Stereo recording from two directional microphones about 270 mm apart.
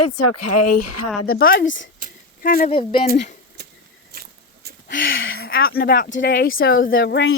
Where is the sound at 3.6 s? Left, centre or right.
Right.